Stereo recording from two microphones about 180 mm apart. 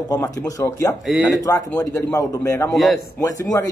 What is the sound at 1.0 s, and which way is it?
Speech, centre (ahead or behind).